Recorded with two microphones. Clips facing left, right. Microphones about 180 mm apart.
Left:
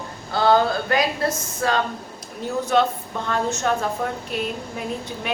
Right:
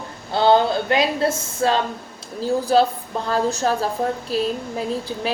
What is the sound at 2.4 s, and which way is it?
A woman's voice, 30° right (ahead or behind).